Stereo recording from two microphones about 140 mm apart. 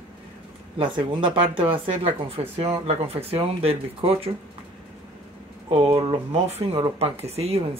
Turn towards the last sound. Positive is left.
turn(degrees=-45)  # may be behind; listen again after turning